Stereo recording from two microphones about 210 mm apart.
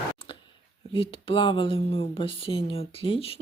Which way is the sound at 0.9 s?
25° left (ahead or behind).